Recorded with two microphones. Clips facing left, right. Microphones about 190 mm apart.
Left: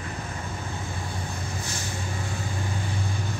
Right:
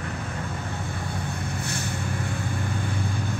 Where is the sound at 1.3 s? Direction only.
60° right (ahead or behind).